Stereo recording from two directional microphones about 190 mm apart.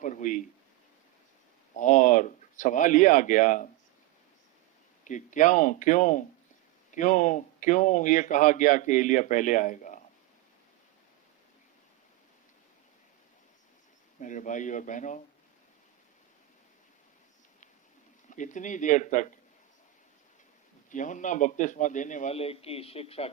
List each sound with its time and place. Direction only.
0.0 s speech: 40° left (ahead or behind)
1.7 s speech: 40° left (ahead or behind)
5.0 s speech: 40° left (ahead or behind)
14.2 s speech: 40° left (ahead or behind)
18.3 s speech: 40° left (ahead or behind)
20.9 s speech: 40° left (ahead or behind)